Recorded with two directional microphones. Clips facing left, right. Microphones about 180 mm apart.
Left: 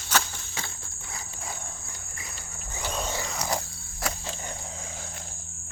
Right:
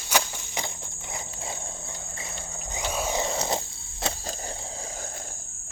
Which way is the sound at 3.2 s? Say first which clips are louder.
Right 3 dB; 25° right (ahead or behind).